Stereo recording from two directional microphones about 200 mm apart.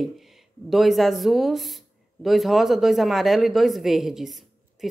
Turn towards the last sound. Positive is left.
turn(degrees=0)  # may be behind; listen again after turning